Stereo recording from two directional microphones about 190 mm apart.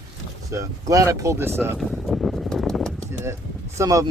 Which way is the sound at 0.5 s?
15° right (ahead or behind).